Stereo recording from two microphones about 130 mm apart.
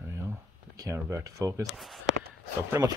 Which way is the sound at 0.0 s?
20° right (ahead or behind).